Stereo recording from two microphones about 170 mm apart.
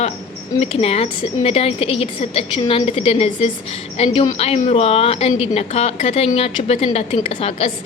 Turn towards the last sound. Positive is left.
turn(degrees=35)  # may be behind; listen again after turning